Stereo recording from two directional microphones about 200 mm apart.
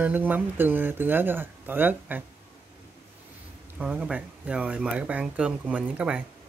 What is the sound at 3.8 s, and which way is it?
Speech, 5° right (ahead or behind).